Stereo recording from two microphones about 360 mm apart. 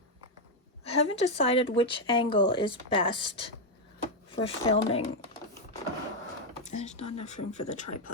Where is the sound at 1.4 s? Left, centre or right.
Centre.